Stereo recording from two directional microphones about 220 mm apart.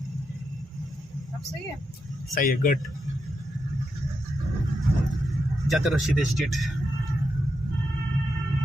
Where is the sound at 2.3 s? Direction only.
40° left (ahead or behind).